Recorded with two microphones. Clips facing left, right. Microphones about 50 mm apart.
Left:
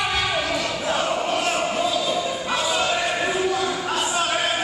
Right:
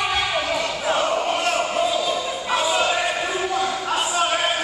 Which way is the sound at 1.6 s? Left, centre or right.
Centre.